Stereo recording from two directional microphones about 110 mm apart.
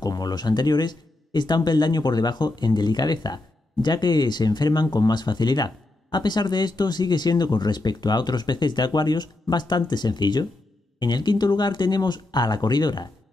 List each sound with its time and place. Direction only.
0.0 s speech: 35° left (ahead or behind)